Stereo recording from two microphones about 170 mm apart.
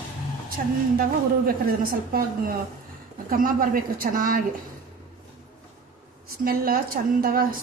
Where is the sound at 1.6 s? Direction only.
60° right (ahead or behind).